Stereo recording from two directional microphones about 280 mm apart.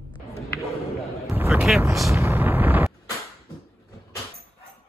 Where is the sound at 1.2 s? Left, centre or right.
Centre.